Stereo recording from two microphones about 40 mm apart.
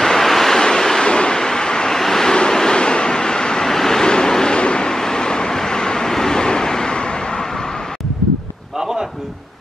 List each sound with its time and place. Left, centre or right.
0.0 s waves: centre
1.0 s vehicle: left
3.6 s vehicle: centre